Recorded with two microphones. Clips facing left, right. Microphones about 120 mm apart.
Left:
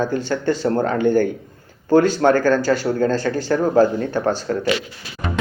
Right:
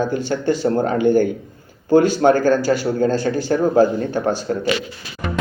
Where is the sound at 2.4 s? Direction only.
10° right (ahead or behind).